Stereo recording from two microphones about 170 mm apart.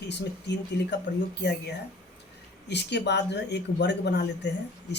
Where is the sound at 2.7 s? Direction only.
85° left.